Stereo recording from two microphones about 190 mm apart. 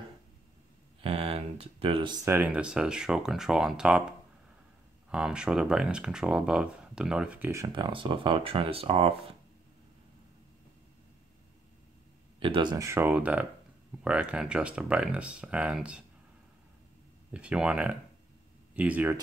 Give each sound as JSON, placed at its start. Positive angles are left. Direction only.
{"t": 1.0, "sound": "a sound", "side_deg": -30}
{"t": 2.2, "sound": "speech", "side_deg": -10}
{"t": 5.1, "sound": "speech", "side_deg": -5}
{"t": 12.4, "sound": "speech", "side_deg": -25}
{"t": 17.3, "sound": "speech", "side_deg": -5}